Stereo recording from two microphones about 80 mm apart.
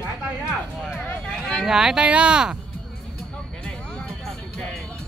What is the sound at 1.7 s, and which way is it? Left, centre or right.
Speech, centre.